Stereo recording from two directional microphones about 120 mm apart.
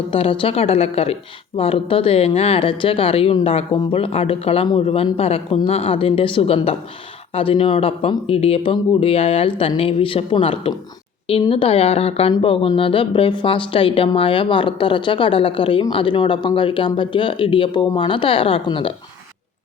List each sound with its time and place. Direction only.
0.1 s a woman's voice: 50° left (ahead or behind)